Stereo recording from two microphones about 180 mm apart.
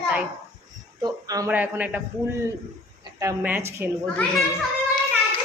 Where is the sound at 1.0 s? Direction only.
20° right (ahead or behind).